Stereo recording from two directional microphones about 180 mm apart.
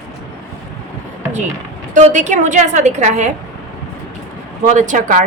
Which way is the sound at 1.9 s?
40° right (ahead or behind).